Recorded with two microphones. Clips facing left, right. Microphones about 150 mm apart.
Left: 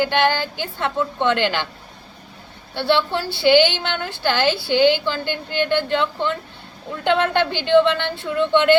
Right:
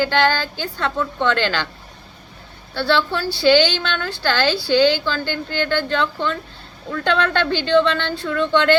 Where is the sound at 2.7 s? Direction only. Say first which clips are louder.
Even; 20° left (ahead or behind).